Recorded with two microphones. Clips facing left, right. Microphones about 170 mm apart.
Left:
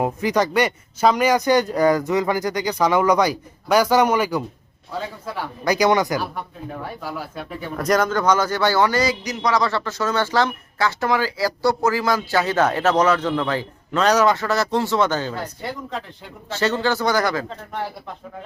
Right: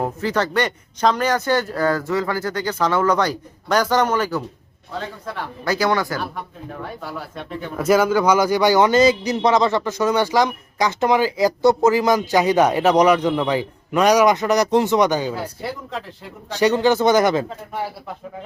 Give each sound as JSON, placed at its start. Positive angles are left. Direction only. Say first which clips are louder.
{"t": 0.0, "sound": "speech", "louder": "left 2 dB", "side_deg": 15}
{"t": 7.0, "sound": "speech", "louder": "left 1 dB", "side_deg": 5}
{"t": 16.5, "sound": "speech", "louder": "right 5 dB", "side_deg": -15}
{"t": 17.5, "sound": "speech", "louder": "right 1 dB", "side_deg": -10}